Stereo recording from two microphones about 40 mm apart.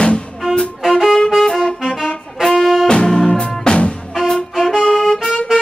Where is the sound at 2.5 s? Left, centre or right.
Centre.